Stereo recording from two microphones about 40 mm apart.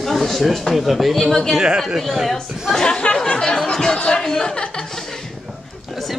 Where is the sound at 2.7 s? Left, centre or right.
Left.